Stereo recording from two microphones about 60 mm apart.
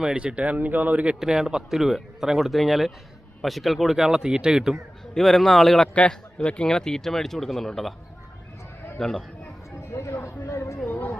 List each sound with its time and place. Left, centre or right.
0.0 s speech: centre
1.2 s speech: centre
5.1 s speech: centre
5.9 s a man's voice: left; by 7.9 s centre
9.0 s a man's voice: centre
9.8 s a man's voice: left